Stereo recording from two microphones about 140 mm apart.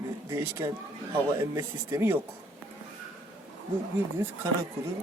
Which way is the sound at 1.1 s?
20° right (ahead or behind).